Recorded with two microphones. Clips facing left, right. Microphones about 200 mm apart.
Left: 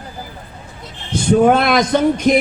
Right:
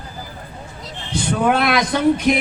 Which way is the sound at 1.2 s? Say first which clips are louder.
Left 6 dB; 45° left (ahead or behind).